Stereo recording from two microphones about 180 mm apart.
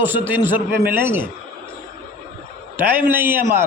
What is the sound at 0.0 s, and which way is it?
A man's voice, 10° right (ahead or behind).